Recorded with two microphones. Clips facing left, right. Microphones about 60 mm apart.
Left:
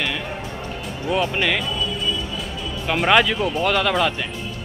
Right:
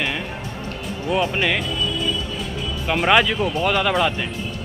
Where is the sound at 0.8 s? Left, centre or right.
Centre.